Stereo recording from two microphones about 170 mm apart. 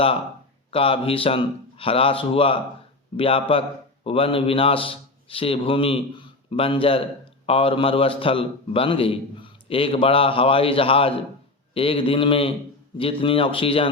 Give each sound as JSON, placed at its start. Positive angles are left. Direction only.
{"t": 0.7, "sound": "a man's voice", "side_deg": 35}